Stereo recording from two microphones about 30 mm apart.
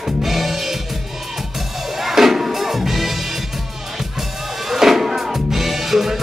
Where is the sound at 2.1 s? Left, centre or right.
Centre.